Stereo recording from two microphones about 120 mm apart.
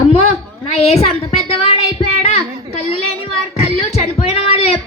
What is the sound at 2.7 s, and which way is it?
Child singing, 55° left (ahead or behind).